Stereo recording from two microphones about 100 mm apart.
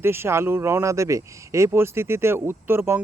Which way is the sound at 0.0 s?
25° right (ahead or behind).